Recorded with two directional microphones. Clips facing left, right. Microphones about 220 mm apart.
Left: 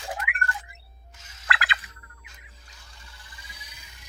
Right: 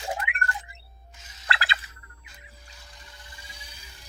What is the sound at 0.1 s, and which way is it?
Music, 25° right (ahead or behind).